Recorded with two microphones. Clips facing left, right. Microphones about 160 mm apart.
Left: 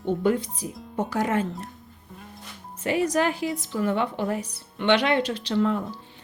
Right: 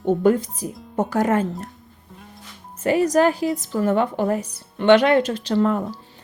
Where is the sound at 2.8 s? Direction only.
45° right (ahead or behind).